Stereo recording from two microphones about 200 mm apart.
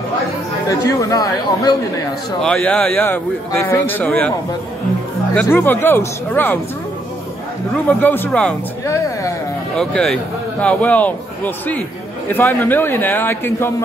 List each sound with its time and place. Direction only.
0.7 s a man's voice: 15° left (ahead or behind)
2.4 s a man's voice: 5° left (ahead or behind)
5.3 s a man's voice: 10° left (ahead or behind)
8.0 s a man's voice: 10° left (ahead or behind)
9.8 s a man's voice: 5° left (ahead or behind)